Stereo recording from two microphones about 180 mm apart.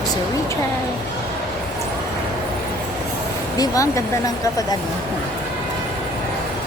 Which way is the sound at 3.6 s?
20° left (ahead or behind).